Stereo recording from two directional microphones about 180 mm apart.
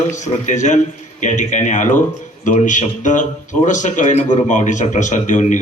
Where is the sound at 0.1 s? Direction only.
40° left (ahead or behind).